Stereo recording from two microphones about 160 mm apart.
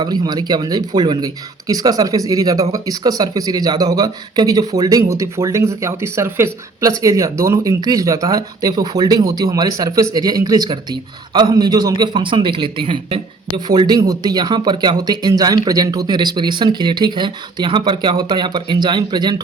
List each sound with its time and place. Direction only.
0.0 s speech: 25° right (ahead or behind)